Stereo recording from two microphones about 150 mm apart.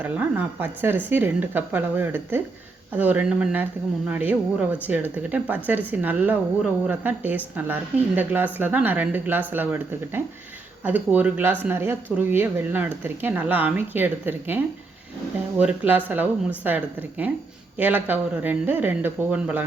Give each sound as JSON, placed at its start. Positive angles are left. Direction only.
{"t": 0.0, "sound": "speech", "side_deg": -10}